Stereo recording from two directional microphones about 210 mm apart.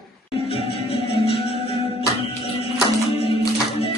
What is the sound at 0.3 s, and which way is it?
Music, 25° left (ahead or behind).